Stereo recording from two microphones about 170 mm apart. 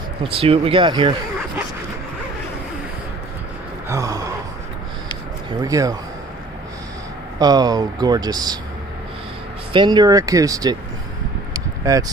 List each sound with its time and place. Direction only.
0.2 s speech: 35° right (ahead or behind)
3.9 s speech: 20° right (ahead or behind)
5.6 s speech: 20° right (ahead or behind)
7.3 s speech: 25° right (ahead or behind)
9.7 s speech: 25° right (ahead or behind)
11.5 s a sound: 20° right (ahead or behind)